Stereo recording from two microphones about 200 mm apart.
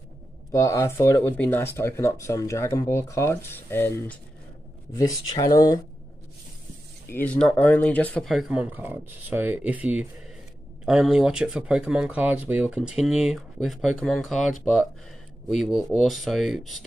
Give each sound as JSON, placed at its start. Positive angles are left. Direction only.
{"t": 0.5, "sound": "speech", "side_deg": 15}
{"t": 7.1, "sound": "speech", "side_deg": 10}